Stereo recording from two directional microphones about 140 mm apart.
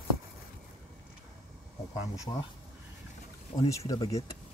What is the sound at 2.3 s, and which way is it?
Speech, 35° left (ahead or behind).